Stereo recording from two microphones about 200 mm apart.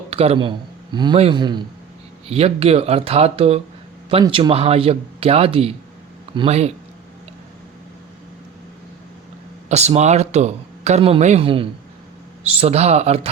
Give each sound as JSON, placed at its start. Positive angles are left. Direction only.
{"t": 0.1, "sound": "a man's voice", "side_deg": -30}
{"t": 9.6, "sound": "speech", "side_deg": -35}